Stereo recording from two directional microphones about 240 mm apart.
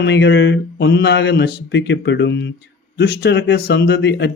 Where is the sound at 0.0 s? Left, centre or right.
Left.